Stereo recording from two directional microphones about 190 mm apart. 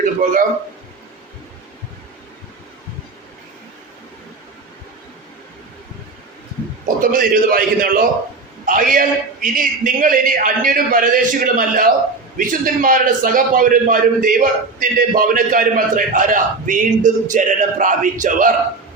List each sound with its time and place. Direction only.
0.0 s a man's voice: 40° right (ahead or behind)
6.8 s a man's voice: 45° right (ahead or behind)